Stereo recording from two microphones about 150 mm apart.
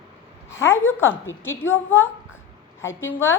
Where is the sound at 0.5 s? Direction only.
15° left (ahead or behind).